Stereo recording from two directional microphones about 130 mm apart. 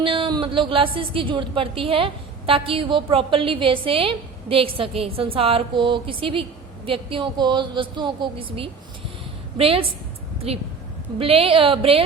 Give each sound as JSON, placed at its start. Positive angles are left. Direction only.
{"t": 0.0, "sound": "a woman's voice", "side_deg": -40}